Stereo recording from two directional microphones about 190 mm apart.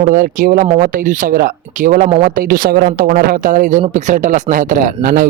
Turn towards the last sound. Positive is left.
turn(degrees=-45)  # may be behind; listen again after turning